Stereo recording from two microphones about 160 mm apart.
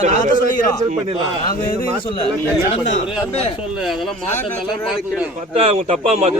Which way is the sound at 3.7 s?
Centre (ahead or behind).